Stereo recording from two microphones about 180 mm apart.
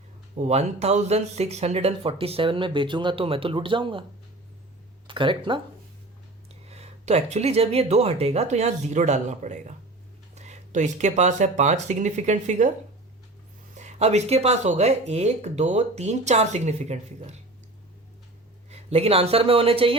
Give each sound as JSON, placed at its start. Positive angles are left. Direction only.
{"t": 0.3, "sound": "speech", "side_deg": -40}
{"t": 5.0, "sound": "speech", "side_deg": -25}
{"t": 6.7, "sound": "speech", "side_deg": -35}
{"t": 13.7, "sound": "speech", "side_deg": -35}
{"t": 18.7, "sound": "speech", "side_deg": -35}